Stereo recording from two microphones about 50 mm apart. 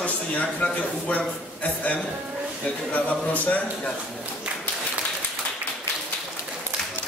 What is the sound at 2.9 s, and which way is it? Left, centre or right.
A man's voice, left.